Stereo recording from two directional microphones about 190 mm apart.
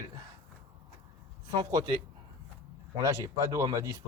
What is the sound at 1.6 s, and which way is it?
Speech, 20° right (ahead or behind).